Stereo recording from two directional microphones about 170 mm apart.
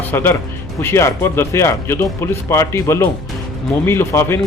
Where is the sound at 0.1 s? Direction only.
15° left (ahead or behind).